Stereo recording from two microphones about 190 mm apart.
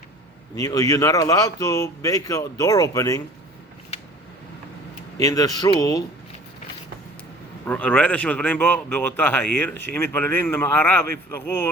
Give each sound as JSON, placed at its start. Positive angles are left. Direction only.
{"t": 0.5, "sound": "speech", "side_deg": 20}
{"t": 5.1, "sound": "speech", "side_deg": 15}
{"t": 7.6, "sound": "speech", "side_deg": 10}